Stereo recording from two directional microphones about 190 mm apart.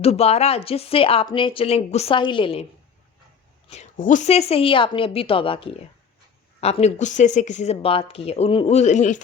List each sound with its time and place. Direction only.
0.0 s speech: 35° left (ahead or behind)
3.7 s speech: 40° left (ahead or behind)